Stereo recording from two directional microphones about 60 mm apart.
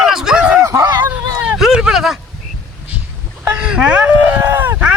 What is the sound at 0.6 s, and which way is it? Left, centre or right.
Speech, right.